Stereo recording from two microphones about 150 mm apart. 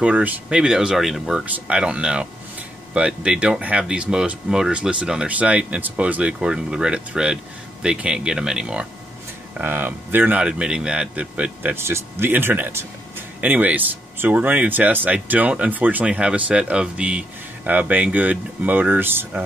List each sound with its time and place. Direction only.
0.0 s speech: 10° right (ahead or behind)